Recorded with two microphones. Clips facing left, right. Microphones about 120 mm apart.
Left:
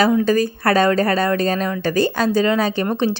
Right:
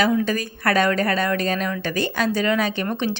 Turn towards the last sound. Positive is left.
turn(degrees=35)  # may be behind; listen again after turning